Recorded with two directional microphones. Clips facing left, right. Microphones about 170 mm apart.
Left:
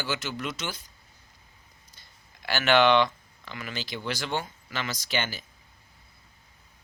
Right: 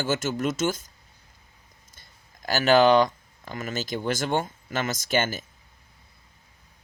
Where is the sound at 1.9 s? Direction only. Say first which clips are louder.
Right 1 dB; 45° right (ahead or behind).